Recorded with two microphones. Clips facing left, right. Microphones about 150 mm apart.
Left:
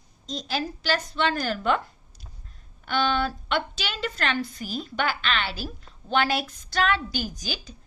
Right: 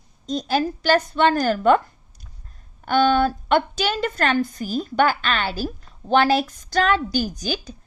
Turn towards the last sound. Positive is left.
turn(degrees=-50)  # may be behind; listen again after turning